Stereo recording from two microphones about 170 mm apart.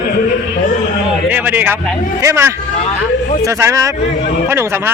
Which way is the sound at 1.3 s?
10° right (ahead or behind).